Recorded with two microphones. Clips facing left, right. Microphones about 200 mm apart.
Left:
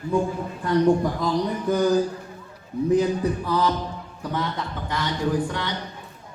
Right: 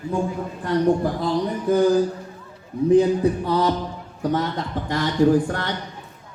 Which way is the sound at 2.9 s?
30° right (ahead or behind).